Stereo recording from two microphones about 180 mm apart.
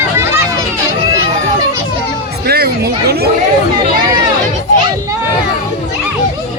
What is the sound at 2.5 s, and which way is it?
Speech, 60° right (ahead or behind).